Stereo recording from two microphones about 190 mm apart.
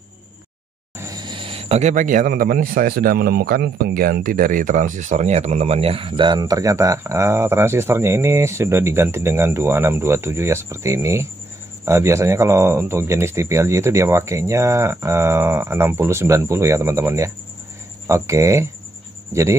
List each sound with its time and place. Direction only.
0.9 s speech: 20° right (ahead or behind)